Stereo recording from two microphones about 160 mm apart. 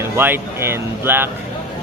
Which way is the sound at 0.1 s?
15° right (ahead or behind).